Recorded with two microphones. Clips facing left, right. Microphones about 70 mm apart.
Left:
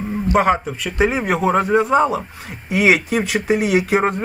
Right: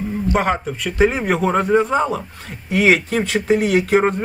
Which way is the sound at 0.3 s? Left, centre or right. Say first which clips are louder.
Left 5 dB; centre.